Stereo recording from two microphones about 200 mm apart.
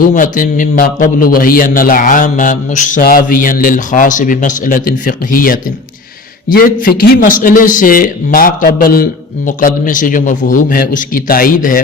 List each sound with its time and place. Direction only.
0.1 s a man's voice: 40° left (ahead or behind)